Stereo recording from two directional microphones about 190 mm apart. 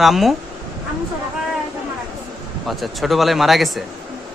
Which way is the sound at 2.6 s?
Centre (ahead or behind).